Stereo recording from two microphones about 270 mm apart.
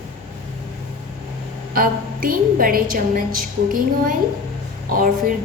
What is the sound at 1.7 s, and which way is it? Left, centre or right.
A woman's voice, right.